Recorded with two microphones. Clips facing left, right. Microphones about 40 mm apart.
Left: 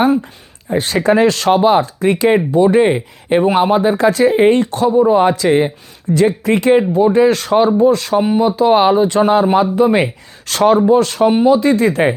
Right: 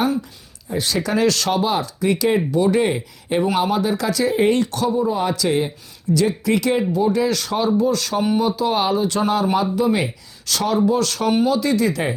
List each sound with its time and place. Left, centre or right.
0.0 s speech: left
8.1 s speech: left